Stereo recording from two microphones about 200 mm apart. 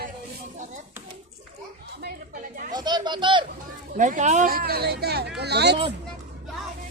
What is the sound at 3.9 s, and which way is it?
Speech, 40° right (ahead or behind).